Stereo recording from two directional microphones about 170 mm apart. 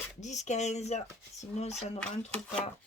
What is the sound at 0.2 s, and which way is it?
Speech, 45° left (ahead or behind).